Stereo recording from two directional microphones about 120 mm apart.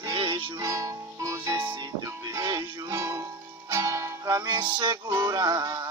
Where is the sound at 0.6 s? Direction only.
30° right (ahead or behind).